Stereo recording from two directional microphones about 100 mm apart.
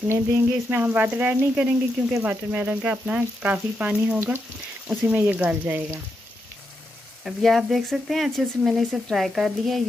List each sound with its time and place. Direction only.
0.1 s frying: 20° right (ahead or behind)
7.2 s speech: centre (ahead or behind)